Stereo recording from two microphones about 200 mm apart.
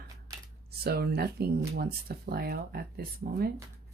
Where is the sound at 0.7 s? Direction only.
55° right (ahead or behind).